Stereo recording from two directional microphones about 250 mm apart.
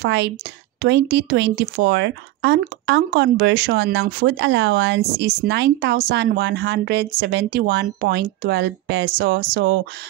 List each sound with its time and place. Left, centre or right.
0.0 s speech: right